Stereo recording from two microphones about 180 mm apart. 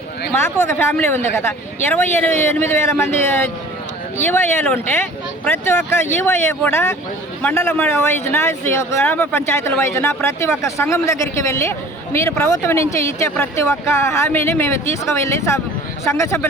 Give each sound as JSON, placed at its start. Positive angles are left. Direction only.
{"t": 0.3, "sound": "speech", "side_deg": 15}